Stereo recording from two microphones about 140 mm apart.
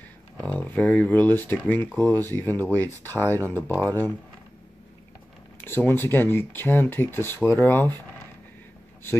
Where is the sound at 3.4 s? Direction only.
15° right (ahead or behind).